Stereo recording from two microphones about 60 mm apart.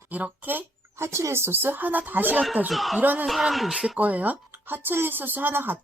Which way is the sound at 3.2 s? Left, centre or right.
Centre.